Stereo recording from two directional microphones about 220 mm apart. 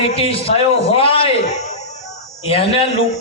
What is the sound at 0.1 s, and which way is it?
A man's voice, 25° left (ahead or behind).